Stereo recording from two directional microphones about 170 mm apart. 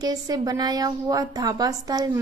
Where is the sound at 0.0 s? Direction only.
25° right (ahead or behind).